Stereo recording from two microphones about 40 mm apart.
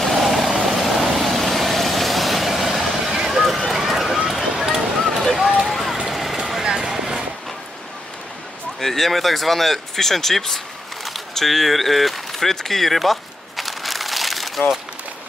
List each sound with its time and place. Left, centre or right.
0.0 s vehicle: centre
3.7 s run: centre
4.3 s a sound: centre
6.0 s vehicle: centre
6.7 s clip-clop: centre
8.8 s speech: centre
13.6 s crumpling: centre